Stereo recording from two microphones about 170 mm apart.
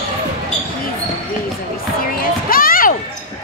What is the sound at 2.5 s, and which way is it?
Basketball bounce, 55° left (ahead or behind).